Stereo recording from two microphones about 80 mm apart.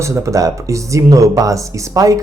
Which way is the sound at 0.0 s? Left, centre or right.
Right.